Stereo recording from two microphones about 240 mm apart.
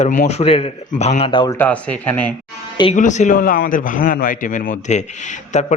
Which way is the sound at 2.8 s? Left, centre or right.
Left.